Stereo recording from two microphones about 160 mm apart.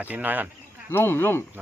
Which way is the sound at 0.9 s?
15° left (ahead or behind).